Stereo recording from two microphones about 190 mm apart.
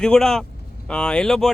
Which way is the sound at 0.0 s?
5° left (ahead or behind).